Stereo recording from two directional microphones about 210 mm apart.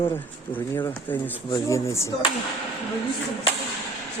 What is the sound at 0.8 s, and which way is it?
Speech, 10° left (ahead or behind).